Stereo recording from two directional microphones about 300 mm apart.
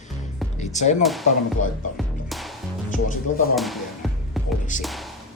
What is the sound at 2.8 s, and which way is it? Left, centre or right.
Speech, left.